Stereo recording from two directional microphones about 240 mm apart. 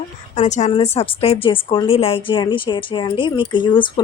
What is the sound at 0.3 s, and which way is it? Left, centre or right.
Speech, left.